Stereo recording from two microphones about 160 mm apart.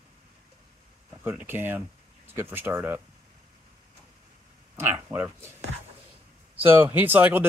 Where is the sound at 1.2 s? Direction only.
10° right (ahead or behind).